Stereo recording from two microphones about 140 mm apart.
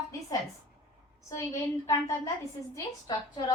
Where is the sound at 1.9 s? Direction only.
25° left (ahead or behind).